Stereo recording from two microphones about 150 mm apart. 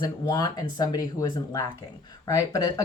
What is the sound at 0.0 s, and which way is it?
A woman's voice, 30° left (ahead or behind).